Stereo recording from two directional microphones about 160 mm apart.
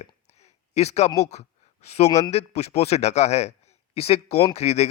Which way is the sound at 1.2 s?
45° left (ahead or behind).